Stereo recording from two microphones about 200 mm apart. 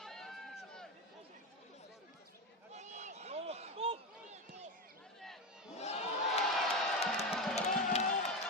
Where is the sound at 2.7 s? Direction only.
35° right (ahead or behind).